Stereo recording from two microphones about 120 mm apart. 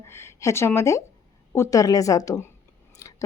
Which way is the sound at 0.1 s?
20° left (ahead or behind).